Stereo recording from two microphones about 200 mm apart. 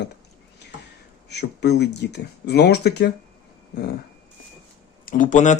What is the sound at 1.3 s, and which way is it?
Speech, 55° left (ahead or behind).